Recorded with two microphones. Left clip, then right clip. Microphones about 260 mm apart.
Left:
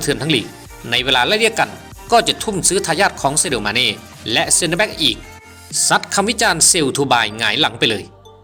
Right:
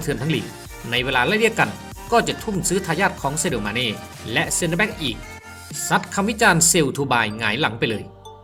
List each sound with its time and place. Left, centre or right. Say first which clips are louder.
0.0 s speech: left 7 dB; centre